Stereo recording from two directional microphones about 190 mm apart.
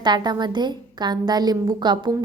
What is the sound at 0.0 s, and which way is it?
A woman's voice, 20° right (ahead or behind).